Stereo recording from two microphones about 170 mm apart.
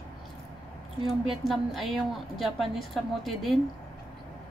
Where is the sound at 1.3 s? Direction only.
Centre (ahead or behind).